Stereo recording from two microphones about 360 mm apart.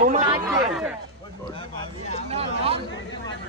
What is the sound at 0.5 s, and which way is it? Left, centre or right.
Speech, centre.